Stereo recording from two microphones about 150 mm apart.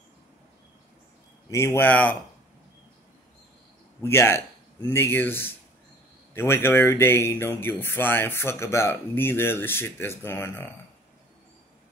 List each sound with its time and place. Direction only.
1.5 s speech: 20° left (ahead or behind)
4.0 s speech: 15° left (ahead or behind)